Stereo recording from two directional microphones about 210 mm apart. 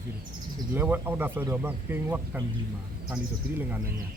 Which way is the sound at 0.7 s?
10° right (ahead or behind).